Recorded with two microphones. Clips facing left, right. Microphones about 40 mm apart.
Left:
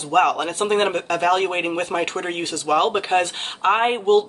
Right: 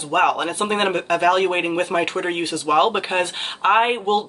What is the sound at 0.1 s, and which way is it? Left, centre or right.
Speech, centre.